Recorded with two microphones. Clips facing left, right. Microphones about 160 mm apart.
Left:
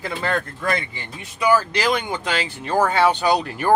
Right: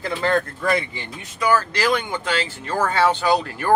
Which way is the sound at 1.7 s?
20° left (ahead or behind).